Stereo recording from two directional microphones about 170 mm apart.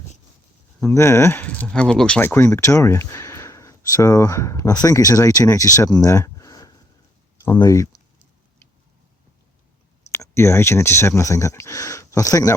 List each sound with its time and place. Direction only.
0.8 s speech: 15° left (ahead or behind)
10.1 s speech: 15° left (ahead or behind)